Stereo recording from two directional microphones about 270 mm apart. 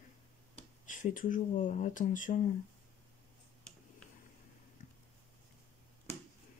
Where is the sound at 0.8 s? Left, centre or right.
Left.